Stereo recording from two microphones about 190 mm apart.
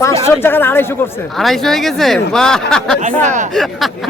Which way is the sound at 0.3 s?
10° left (ahead or behind).